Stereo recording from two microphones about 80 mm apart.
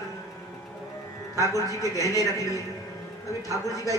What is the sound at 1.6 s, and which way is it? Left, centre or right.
Speech, left.